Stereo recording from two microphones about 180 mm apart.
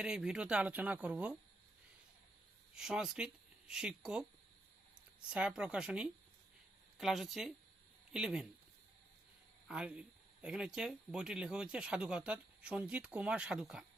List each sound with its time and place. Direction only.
0.0 s speech: 5° right (ahead or behind)
2.7 s speech: 5° right (ahead or behind)
5.3 s speech: 5° right (ahead or behind)
9.6 s speech: 5° right (ahead or behind)